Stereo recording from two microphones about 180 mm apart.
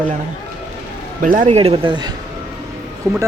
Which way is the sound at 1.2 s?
45° right (ahead or behind).